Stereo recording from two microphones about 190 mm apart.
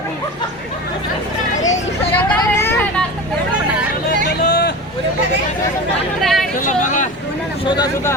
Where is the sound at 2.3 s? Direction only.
10° left (ahead or behind).